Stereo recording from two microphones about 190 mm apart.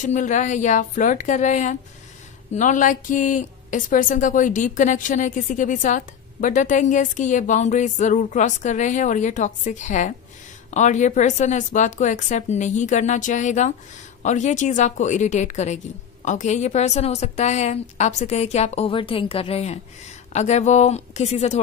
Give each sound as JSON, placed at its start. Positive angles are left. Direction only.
{"t": 0.0, "sound": "speech", "side_deg": 40}